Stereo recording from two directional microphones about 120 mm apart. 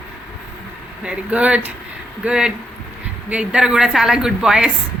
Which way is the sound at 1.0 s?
10° right (ahead or behind).